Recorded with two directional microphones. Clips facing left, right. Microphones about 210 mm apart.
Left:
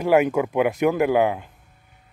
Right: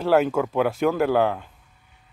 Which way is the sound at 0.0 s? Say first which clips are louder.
Left 1 dB; 15° left (ahead or behind).